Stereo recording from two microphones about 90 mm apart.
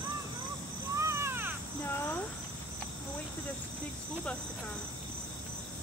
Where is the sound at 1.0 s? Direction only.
30° right (ahead or behind).